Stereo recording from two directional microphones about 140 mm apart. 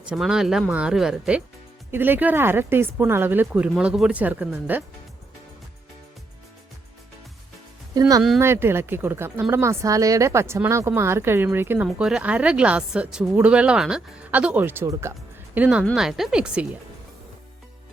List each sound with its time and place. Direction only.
0.0 s speech: 5° right (ahead or behind)
1.9 s speech: 15° right (ahead or behind)
7.9 s speech: 25° right (ahead or behind)
11.9 s speech: 5° right (ahead or behind)